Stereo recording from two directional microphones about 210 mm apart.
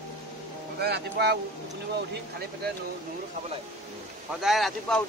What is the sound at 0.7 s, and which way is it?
Speech, 50° right (ahead or behind).